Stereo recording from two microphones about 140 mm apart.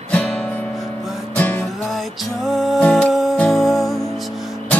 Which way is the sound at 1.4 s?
10° left (ahead or behind).